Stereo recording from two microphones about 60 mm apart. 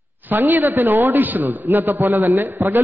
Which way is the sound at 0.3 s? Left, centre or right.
Right.